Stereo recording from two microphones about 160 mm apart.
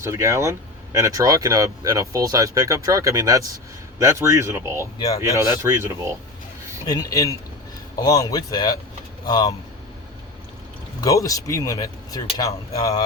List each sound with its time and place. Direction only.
0.0 s speech: 15° right (ahead or behind)
4.9 s speech: 20° left (ahead or behind)
5.3 s speech: 20° right (ahead or behind)
6.8 s speech: 25° left (ahead or behind)
11.0 s speech: 20° left (ahead or behind)